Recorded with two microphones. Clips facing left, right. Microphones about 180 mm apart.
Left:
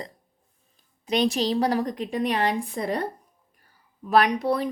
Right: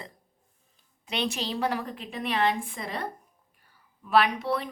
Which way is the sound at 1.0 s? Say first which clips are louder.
Left 8 dB; 40° left (ahead or behind).